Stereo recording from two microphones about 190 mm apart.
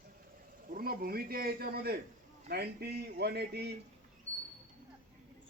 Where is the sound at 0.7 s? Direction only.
50° right (ahead or behind).